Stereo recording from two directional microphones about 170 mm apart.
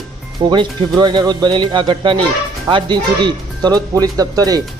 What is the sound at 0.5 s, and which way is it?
Speech, 25° right (ahead or behind).